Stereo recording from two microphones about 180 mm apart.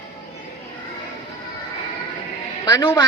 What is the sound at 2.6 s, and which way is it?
Speech, 20° left (ahead or behind).